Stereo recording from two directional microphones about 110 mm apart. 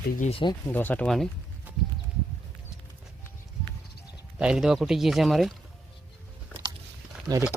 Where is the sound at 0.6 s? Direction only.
15° left (ahead or behind).